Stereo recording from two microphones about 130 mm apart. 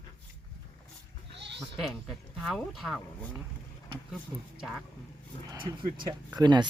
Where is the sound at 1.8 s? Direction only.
Centre (ahead or behind).